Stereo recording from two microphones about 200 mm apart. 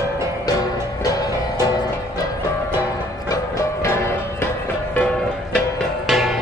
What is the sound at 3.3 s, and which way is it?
Music, 15° left (ahead or behind).